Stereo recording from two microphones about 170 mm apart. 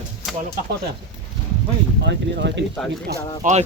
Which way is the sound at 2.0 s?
90° right.